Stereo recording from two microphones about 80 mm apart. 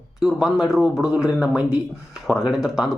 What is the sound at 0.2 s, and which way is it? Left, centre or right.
A man's voice, centre.